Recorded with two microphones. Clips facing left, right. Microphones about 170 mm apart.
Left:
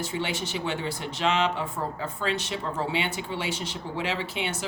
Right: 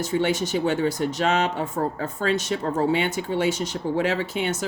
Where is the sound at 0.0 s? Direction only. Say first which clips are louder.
Right 7 dB; 45° right (ahead or behind).